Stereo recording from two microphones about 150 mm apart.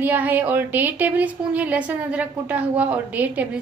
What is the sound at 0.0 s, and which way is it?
Speech, 10° right (ahead or behind).